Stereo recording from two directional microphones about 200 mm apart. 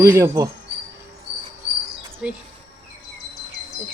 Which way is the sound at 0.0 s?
15° right (ahead or behind).